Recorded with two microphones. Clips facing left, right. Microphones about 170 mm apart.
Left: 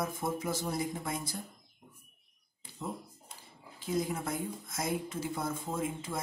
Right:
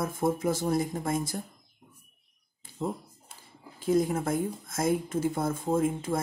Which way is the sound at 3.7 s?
50° right (ahead or behind).